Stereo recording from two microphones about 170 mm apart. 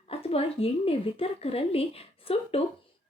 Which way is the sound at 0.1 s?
35° left (ahead or behind).